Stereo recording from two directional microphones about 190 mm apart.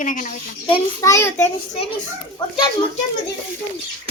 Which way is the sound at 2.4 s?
25° left (ahead or behind).